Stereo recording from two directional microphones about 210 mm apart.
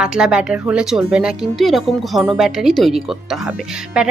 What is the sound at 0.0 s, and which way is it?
Speech, 5° right (ahead or behind).